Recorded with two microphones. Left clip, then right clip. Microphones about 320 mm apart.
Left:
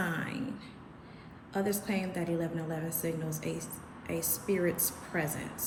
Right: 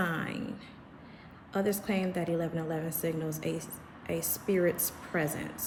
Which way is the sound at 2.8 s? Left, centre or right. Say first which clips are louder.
Right 2 dB; right.